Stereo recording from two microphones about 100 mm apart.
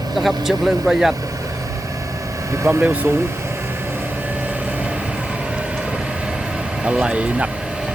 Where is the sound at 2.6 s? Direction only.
25° right (ahead or behind).